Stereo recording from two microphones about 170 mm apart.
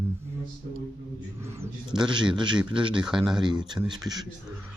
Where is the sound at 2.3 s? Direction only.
25° right (ahead or behind).